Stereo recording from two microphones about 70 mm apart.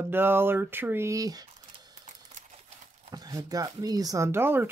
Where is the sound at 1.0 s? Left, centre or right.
Right.